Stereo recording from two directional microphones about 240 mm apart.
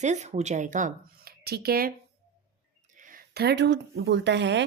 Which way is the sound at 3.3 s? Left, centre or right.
Right.